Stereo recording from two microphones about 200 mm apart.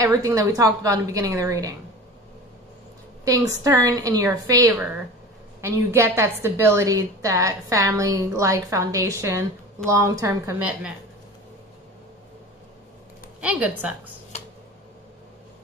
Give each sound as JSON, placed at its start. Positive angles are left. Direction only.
{"t": 0.0, "sound": "a woman's voice", "side_deg": -15}
{"t": 3.3, "sound": "a woman's voice", "side_deg": -15}
{"t": 13.4, "sound": "a woman's voice", "side_deg": -5}